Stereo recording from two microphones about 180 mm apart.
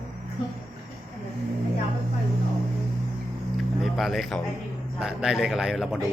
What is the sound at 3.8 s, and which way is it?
A man's voice, centre (ahead or behind).